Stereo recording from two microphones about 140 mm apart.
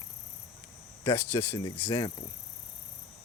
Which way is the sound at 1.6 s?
30° left (ahead or behind).